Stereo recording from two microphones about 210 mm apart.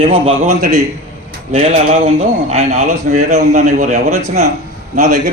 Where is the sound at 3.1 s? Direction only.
35° right (ahead or behind).